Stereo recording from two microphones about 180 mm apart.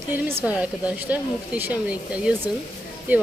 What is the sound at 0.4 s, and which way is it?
Speech, 5° right (ahead or behind).